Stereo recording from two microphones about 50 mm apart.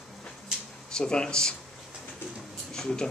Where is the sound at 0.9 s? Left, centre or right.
Centre.